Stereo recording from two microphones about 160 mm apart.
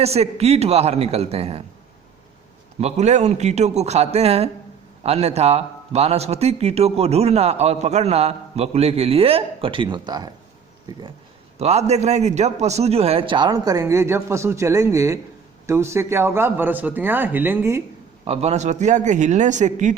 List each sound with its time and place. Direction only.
0.0 s a man's voice: 40° right (ahead or behind)
2.8 s a man's voice: 45° right (ahead or behind); by 10.3 s 25° right (ahead or behind)
11.6 s a man's voice: 45° right (ahead or behind); by 17.8 s 15° right (ahead or behind)
18.3 s speech: 40° right (ahead or behind)